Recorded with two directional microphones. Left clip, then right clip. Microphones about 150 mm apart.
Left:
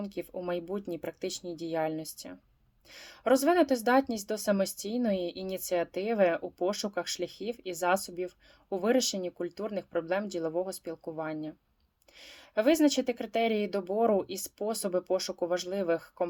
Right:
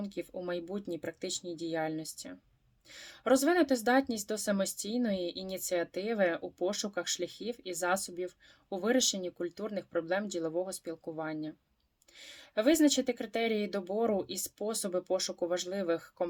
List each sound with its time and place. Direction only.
0.0 s speech: 20° right (ahead or behind)